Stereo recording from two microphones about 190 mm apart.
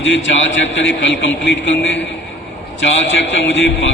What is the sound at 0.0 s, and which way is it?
A man's voice, 75° left (ahead or behind).